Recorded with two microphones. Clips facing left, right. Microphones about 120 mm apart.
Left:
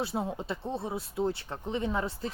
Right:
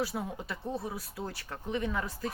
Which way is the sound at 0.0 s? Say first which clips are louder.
Left 2 dB; 25° left (ahead or behind).